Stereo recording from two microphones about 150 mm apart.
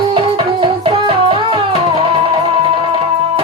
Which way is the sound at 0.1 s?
35° right (ahead or behind).